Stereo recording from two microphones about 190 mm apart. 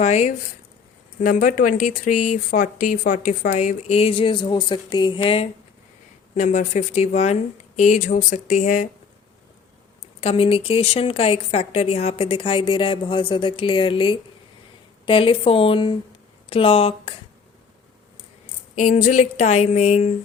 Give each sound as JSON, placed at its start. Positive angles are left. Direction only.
{"t": 0.0, "sound": "speech", "side_deg": 35}
{"t": 6.3, "sound": "speech", "side_deg": 40}
{"t": 10.2, "sound": "speech", "side_deg": 30}
{"t": 18.8, "sound": "speech", "side_deg": 40}